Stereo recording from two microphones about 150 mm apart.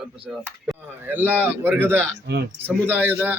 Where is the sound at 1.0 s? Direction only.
15° right (ahead or behind).